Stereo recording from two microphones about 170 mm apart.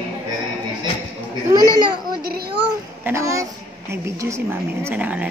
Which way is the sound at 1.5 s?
25° right (ahead or behind).